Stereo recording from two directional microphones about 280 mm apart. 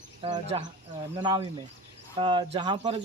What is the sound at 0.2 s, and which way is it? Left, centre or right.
Speech, centre.